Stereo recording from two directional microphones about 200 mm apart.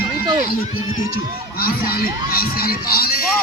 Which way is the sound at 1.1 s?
50° left (ahead or behind).